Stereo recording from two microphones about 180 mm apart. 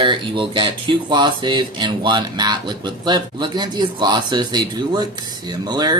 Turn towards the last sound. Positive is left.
turn(degrees=-20)  # may be behind; listen again after turning